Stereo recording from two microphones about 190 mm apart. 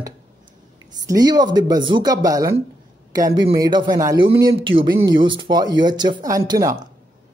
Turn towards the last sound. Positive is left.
turn(degrees=-15)  # may be behind; listen again after turning